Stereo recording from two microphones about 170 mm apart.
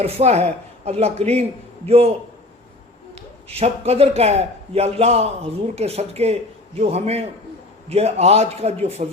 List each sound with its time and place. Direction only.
0.0 s a man's voice: 40° right (ahead or behind)
3.5 s a man's voice: 35° right (ahead or behind)